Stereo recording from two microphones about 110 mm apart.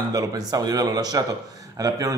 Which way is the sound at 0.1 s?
35° right (ahead or behind).